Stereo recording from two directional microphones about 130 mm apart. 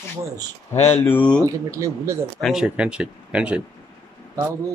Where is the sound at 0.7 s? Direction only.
55° left (ahead or behind).